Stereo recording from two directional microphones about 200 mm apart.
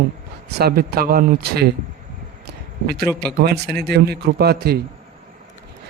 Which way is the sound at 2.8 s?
50° right (ahead or behind).